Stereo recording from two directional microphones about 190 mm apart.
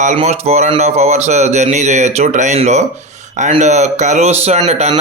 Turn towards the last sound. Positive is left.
turn(degrees=-35)  # may be behind; listen again after turning